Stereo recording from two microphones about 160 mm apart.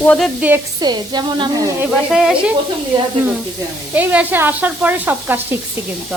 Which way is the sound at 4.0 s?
10° right (ahead or behind).